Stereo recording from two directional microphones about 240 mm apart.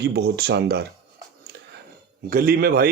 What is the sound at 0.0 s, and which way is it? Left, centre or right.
Speech, right.